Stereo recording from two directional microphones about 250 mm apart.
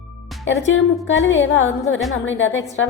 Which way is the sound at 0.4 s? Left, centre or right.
Left.